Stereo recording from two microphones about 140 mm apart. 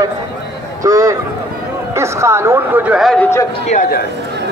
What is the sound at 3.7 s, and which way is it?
Speech, 65° left (ahead or behind).